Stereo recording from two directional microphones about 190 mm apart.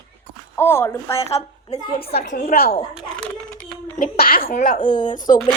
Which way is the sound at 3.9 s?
50° left (ahead or behind).